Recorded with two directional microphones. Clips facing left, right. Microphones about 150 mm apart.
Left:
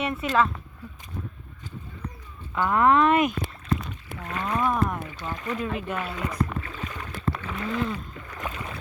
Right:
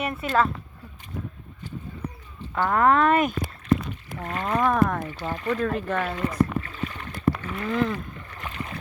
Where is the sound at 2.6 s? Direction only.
45° right (ahead or behind); by 5.0 s 75° right (ahead or behind).